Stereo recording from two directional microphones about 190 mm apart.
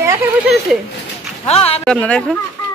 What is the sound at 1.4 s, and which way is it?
Speech, 30° left (ahead or behind).